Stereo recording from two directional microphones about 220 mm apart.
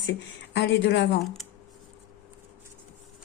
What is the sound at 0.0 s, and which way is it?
Speech, 55° left (ahead or behind).